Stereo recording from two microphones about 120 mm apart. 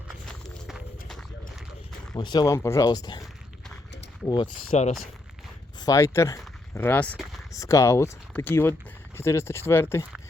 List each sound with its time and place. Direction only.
0.3 s walk: 5° left (ahead or behind)
2.1 s speech: 35° left (ahead or behind)
4.7 s speech: 70° left (ahead or behind)
5.8 s speech: 25° left (ahead or behind)
7.5 s speech: 25° left (ahead or behind)